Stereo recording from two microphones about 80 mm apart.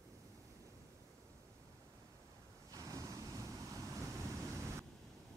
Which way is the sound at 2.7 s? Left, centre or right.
Right.